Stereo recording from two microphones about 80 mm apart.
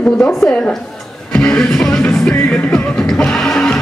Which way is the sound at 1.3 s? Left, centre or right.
Centre.